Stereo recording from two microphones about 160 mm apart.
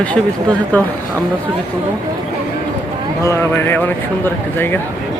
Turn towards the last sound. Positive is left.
turn(degrees=10)  # may be behind; listen again after turning